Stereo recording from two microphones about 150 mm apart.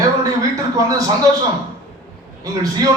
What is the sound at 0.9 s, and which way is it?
Speech, 25° right (ahead or behind).